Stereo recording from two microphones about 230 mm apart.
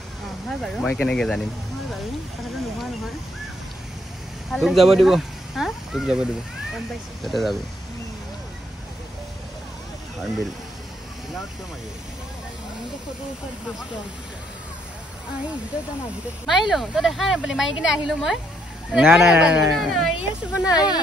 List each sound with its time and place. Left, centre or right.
0.5 s a woman's voice: centre
4.5 s speech: centre
7.2 s a woman's voice: centre
16.4 s a woman's voice: centre
20.6 s speech: centre